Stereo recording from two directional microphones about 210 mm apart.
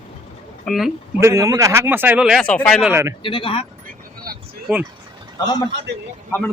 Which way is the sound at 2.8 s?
10° right (ahead or behind).